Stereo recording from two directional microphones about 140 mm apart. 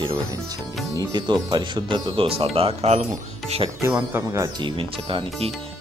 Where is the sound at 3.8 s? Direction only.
15° right (ahead or behind).